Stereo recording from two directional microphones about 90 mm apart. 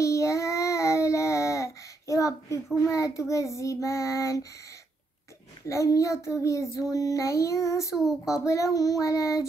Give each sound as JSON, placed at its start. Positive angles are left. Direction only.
{"t": 0.0, "sound": "child singing", "side_deg": 35}
{"t": 5.7, "sound": "a child's voice", "side_deg": 35}
{"t": 7.9, "sound": "speech", "side_deg": -5}
{"t": 8.5, "sound": "a child's voice", "side_deg": 35}